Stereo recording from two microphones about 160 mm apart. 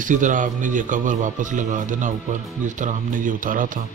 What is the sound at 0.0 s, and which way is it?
A man's voice, 55° right (ahead or behind).